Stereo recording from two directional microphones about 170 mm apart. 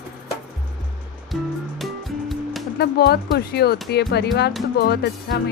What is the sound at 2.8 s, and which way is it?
Speech, 70° left (ahead or behind).